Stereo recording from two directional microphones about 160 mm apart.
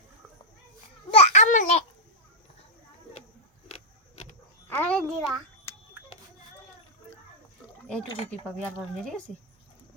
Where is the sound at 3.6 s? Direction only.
45° left (ahead or behind).